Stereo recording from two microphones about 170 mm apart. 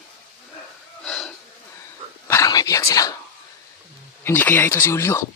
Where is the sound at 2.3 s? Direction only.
20° left (ahead or behind).